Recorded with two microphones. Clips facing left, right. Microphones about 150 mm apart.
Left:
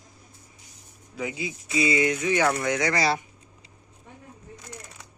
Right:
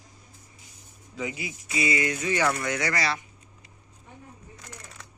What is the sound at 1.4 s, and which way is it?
Speech, 25° left (ahead or behind).